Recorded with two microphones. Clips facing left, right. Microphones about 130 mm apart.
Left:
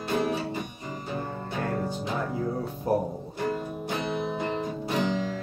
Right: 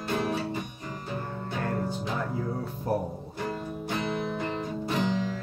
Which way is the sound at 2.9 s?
15° left (ahead or behind).